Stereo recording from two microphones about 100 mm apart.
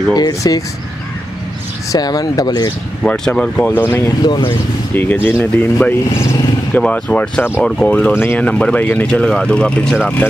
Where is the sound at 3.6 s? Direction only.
25° left (ahead or behind).